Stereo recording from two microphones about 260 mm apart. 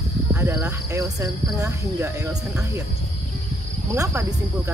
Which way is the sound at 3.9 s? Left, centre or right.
Centre.